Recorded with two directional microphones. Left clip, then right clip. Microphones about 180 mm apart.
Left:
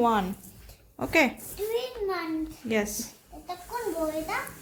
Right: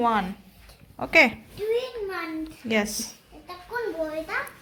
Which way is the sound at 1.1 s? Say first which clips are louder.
Right 5 dB; 15° left (ahead or behind).